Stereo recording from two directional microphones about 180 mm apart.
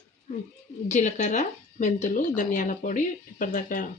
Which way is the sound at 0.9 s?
40° left (ahead or behind).